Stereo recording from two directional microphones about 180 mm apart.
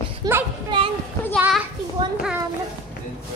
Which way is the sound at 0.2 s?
25° right (ahead or behind).